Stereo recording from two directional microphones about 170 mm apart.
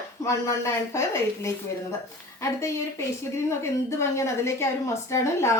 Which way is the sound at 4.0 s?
15° left (ahead or behind).